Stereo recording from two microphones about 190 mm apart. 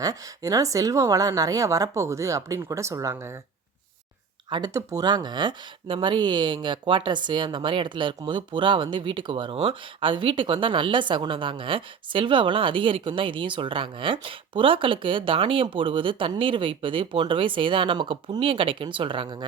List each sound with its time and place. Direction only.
0.0 s a woman's voice: 20° right (ahead or behind)
4.4 s speech: 25° right (ahead or behind)